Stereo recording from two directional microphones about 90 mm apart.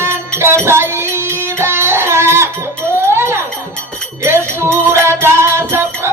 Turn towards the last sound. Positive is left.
turn(degrees=-25)  # may be behind; listen again after turning